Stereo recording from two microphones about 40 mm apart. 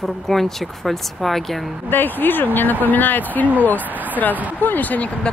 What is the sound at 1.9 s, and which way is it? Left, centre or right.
Speech, left.